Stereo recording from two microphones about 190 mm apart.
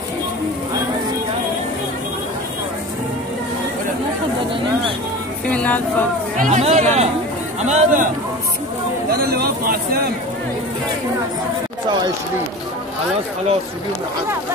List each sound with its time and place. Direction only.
5.5 s speech: 5° left (ahead or behind)
6.3 s speech: 40° right (ahead or behind)
9.1 s speech: 55° right (ahead or behind)